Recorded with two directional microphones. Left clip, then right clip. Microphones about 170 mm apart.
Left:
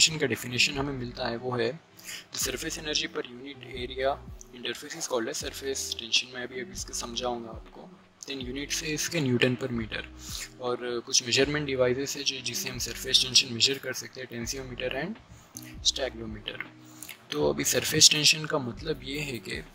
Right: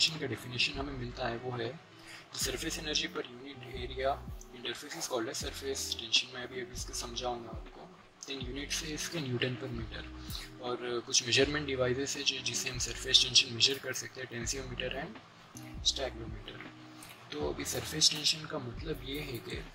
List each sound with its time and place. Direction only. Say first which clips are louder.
0.0 s speech: left 7 dB; 45° left (ahead or behind)
1.0 s speech: left 4 dB; 30° left (ahead or behind)
2.3 s speech: left 3 dB; 40° left (ahead or behind)
15.8 s speech: left 5 dB; 55° left (ahead or behind)
17.3 s speech: left 10 dB; 55° left (ahead or behind)